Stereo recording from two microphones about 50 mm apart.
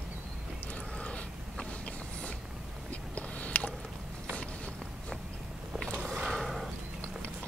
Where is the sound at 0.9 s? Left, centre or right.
Left.